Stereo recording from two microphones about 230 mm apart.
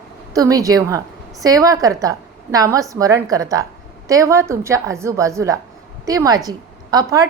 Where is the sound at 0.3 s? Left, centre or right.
Centre.